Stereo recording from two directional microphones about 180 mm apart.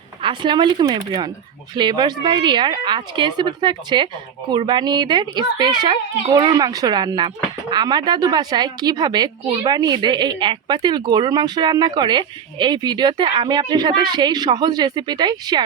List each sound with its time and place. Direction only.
0.2 s a woman's voice: 25° right (ahead or behind)